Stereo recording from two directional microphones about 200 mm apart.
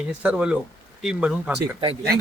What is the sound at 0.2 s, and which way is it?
Speech, 5° right (ahead or behind).